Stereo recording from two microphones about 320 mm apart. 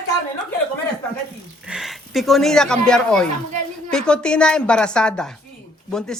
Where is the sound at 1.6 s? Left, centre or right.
Centre.